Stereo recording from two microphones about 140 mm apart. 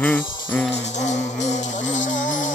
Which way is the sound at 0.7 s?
55° left (ahead or behind).